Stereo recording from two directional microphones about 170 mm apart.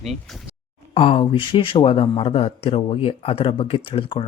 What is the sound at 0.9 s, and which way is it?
Speech, 35° left (ahead or behind).